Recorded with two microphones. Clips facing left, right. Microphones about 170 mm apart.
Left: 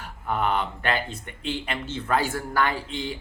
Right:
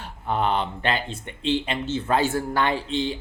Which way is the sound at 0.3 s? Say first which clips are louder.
Right 2 dB; 30° right (ahead or behind).